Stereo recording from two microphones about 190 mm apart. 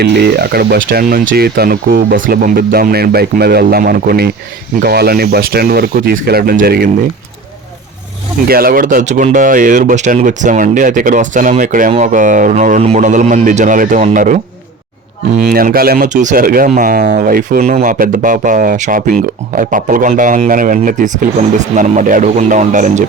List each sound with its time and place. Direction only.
0.0 s speech: 60° right (ahead or behind)
8.4 s speech: 50° right (ahead or behind)
15.4 s speech: 50° right (ahead or behind)
17.6 s a man's voice: 35° right (ahead or behind)